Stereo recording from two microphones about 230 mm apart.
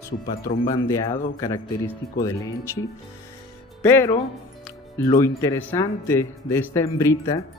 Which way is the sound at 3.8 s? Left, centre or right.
Centre.